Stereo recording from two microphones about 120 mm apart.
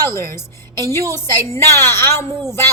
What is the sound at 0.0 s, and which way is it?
A woman's voice, 25° left (ahead or behind).